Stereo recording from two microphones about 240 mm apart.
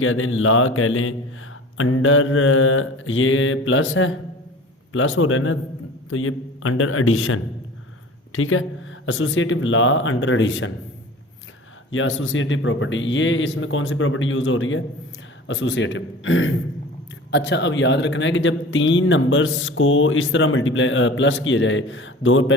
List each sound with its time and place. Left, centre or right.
0.0 s a man's voice: left
11.9 s a man's voice: left